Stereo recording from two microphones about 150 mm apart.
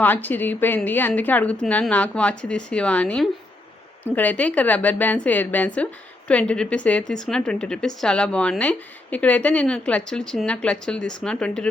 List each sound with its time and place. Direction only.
0.0 s a woman's voice: 10° left (ahead or behind)